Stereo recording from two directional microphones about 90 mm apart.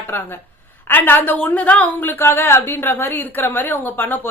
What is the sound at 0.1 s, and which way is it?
A woman's voice, 20° left (ahead or behind).